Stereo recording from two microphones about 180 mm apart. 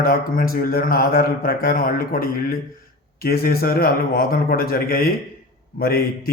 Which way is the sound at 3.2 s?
60° left (ahead or behind).